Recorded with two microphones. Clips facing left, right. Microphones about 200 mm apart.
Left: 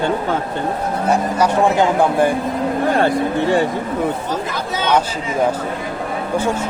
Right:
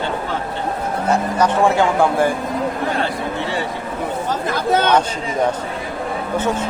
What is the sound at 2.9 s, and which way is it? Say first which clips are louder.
Speech: left 6 dB; 45° left (ahead or behind).